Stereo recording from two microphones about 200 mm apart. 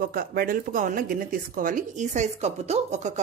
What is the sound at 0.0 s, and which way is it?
Speech, 45° right (ahead or behind).